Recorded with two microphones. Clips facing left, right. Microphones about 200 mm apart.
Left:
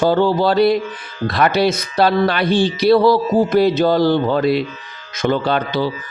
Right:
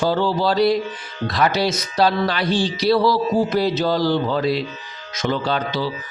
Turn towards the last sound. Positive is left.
turn(degrees=55)  # may be behind; listen again after turning